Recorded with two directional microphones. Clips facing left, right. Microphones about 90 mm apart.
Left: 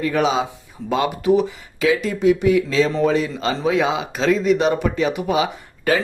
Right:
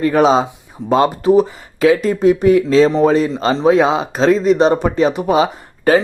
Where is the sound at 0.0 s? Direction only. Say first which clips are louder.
Right 7 dB; 40° right (ahead or behind).